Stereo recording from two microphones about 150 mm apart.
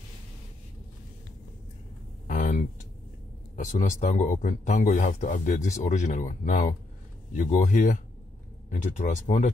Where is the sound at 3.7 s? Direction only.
55° left (ahead or behind).